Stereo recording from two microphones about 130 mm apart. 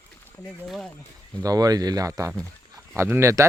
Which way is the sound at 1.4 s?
30° right (ahead or behind).